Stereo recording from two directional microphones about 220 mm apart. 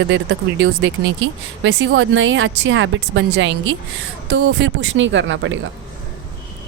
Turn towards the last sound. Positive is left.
turn(degrees=-55)  # may be behind; listen again after turning